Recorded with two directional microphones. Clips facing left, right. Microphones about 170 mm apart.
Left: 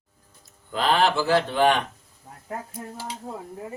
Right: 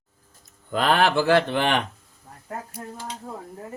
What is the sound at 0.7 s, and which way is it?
Speech, 55° right (ahead or behind).